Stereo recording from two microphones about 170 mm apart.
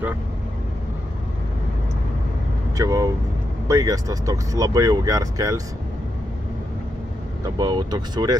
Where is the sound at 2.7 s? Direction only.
20° right (ahead or behind).